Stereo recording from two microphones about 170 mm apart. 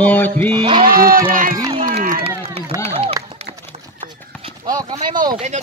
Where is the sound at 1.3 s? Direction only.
55° right (ahead or behind).